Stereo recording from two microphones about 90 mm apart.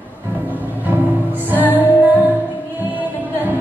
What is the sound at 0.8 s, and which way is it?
Music, 20° right (ahead or behind).